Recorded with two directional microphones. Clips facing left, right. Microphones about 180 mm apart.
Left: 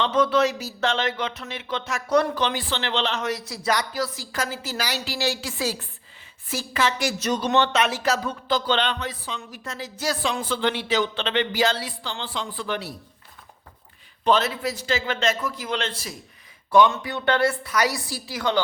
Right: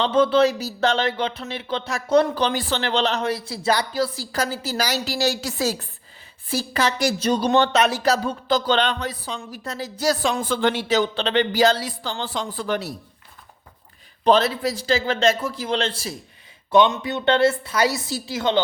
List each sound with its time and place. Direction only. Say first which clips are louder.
0.0 s speech: right 3 dB; 30° right (ahead or behind)
14.3 s a woman's voice: right 4 dB; 35° right (ahead or behind)